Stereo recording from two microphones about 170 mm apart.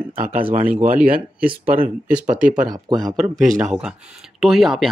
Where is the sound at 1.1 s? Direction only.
5° right (ahead or behind).